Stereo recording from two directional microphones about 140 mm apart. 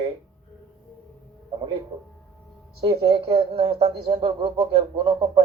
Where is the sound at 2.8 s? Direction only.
30° right (ahead or behind).